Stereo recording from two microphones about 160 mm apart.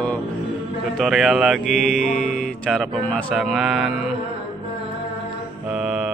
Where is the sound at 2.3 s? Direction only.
Centre (ahead or behind).